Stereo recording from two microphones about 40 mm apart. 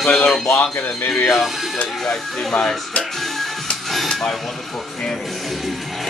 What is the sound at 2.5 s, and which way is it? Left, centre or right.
Speech, centre.